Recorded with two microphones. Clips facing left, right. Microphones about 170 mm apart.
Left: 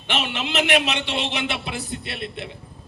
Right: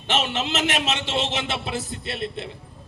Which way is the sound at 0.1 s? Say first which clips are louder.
Right 2 dB; 40° right (ahead or behind).